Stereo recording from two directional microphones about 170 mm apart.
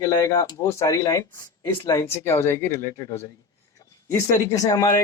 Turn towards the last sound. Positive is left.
turn(degrees=20)  # may be behind; listen again after turning